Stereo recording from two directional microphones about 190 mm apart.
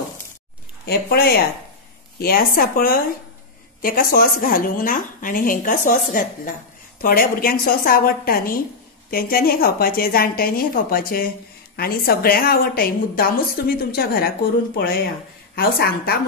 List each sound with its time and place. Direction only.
0.8 s a woman's voice: 55° left (ahead or behind)
15.5 s a woman's voice: 55° left (ahead or behind)